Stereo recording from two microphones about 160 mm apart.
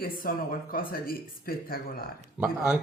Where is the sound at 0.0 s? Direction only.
65° left (ahead or behind).